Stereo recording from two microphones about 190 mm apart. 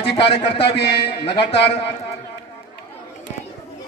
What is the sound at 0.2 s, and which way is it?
Speech, 65° left (ahead or behind).